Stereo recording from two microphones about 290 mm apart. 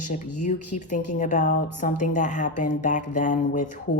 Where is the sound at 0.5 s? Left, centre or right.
Left.